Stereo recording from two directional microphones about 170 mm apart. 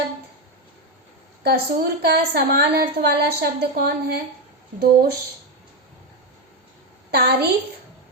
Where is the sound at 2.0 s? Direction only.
70° right (ahead or behind).